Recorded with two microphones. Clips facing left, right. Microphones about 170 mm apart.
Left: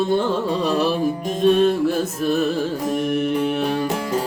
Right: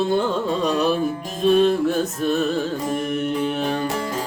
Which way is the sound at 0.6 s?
5° left (ahead or behind).